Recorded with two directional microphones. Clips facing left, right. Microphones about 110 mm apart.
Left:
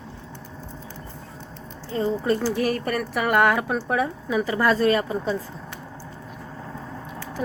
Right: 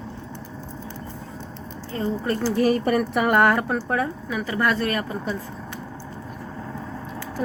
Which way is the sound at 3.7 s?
10° left (ahead or behind).